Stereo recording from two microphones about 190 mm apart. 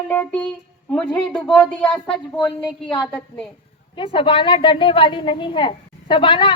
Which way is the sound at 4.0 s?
30° left (ahead or behind).